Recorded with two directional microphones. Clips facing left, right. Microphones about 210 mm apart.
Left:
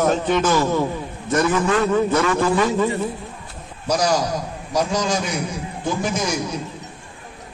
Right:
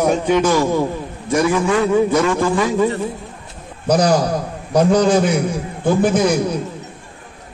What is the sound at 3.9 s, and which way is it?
A man's voice, 55° right (ahead or behind).